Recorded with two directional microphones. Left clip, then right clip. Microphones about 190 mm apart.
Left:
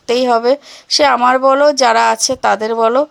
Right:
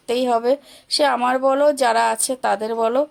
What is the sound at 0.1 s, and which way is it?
A woman's voice, 15° left (ahead or behind).